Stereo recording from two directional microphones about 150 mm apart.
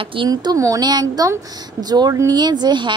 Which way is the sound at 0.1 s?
30° right (ahead or behind).